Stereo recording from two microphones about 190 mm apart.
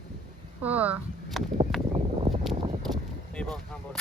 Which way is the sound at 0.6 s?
10° right (ahead or behind).